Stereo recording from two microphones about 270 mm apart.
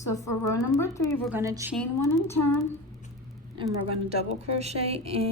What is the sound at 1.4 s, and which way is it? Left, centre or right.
Speech, centre.